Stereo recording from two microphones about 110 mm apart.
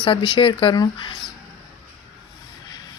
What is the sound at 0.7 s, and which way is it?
Speech, 40° left (ahead or behind).